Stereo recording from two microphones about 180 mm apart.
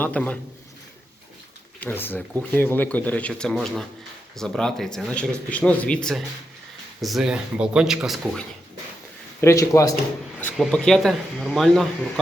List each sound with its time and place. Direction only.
0.0 s speech: 5° left (ahead or behind)
1.8 s speech: 10° left (ahead or behind)
9.4 s speech: 15° left (ahead or behind)
10.5 s speech: centre (ahead or behind)